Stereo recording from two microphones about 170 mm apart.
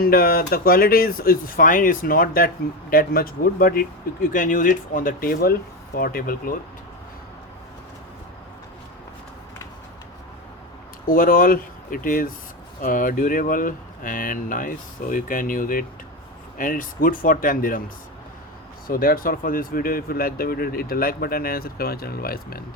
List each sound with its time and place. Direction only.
0.0 s speech: 60° left (ahead or behind)
11.0 s speech: 55° left (ahead or behind)
18.9 s speech: 60° left (ahead or behind)